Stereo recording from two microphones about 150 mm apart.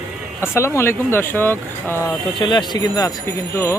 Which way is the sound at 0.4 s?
20° left (ahead or behind).